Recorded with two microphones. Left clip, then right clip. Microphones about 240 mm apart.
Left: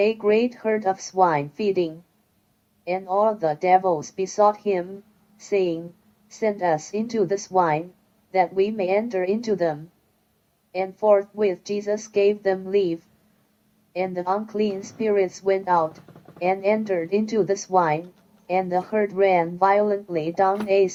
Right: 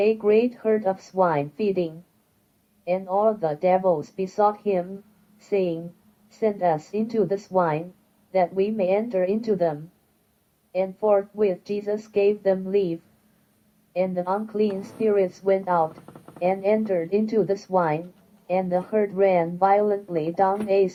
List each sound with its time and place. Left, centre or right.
0.0 s speech: left